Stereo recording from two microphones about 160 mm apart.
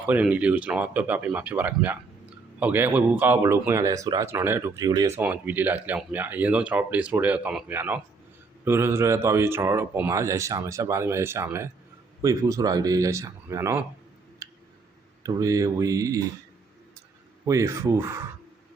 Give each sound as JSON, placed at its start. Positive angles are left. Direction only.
{"t": 0.1, "sound": "speech", "side_deg": -10}
{"t": 5.2, "sound": "speech", "side_deg": -10}
{"t": 14.4, "sound": "tick", "side_deg": -20}
{"t": 15.2, "sound": "speech", "side_deg": -20}
{"t": 17.4, "sound": "speech", "side_deg": -20}